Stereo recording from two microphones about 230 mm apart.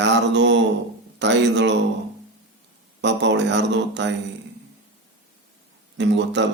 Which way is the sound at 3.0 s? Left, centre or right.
Right.